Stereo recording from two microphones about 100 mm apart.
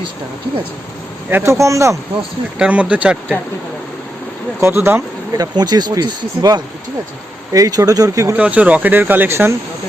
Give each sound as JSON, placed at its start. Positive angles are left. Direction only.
{"t": 1.3, "sound": "speech", "side_deg": -25}
{"t": 2.6, "sound": "speech", "side_deg": -15}
{"t": 4.6, "sound": "speech", "side_deg": -25}
{"t": 5.4, "sound": "speech", "side_deg": -45}
{"t": 8.4, "sound": "speech", "side_deg": -15}